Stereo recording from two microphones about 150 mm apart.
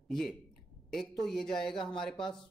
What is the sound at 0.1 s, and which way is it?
Speech, centre (ahead or behind).